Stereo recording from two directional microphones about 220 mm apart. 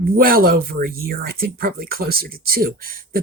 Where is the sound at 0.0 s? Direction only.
40° right (ahead or behind).